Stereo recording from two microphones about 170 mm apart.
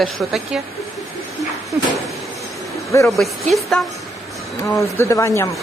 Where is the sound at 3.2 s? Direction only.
Centre (ahead or behind).